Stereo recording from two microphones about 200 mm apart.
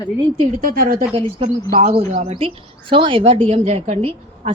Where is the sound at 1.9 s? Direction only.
30° right (ahead or behind).